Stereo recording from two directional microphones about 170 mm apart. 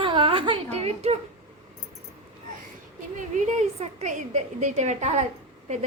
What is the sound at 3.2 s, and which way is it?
A woman's voice, 45° right (ahead or behind).